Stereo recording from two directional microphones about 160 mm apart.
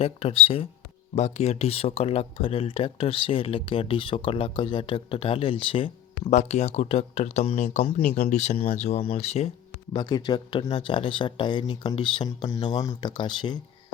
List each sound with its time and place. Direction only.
0.0 s speech: 35° left (ahead or behind)
9.9 s speech: 25° left (ahead or behind)